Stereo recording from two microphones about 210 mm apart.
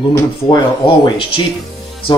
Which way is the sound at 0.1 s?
20° left (ahead or behind).